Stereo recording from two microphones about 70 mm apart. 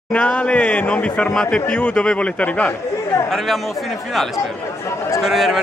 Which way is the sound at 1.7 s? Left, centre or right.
Left.